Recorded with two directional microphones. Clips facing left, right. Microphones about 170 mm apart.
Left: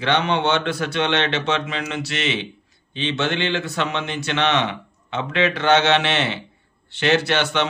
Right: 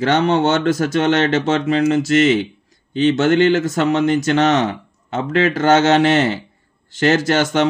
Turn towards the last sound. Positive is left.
turn(degrees=-40)  # may be behind; listen again after turning